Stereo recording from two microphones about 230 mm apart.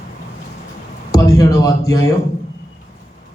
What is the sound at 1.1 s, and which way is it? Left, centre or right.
Speech, centre.